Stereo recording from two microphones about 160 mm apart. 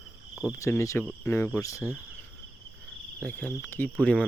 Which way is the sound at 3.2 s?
10° left (ahead or behind).